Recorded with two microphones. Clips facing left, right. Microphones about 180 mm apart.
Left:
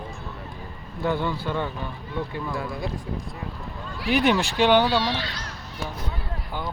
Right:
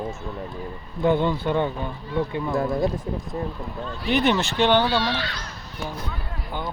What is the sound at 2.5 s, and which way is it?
Speech, 45° right (ahead or behind).